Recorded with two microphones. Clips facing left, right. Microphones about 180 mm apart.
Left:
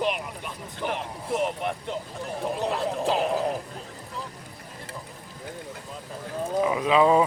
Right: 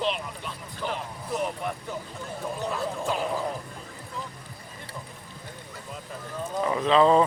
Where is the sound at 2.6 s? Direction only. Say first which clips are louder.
Left 3 dB; 35° left (ahead or behind).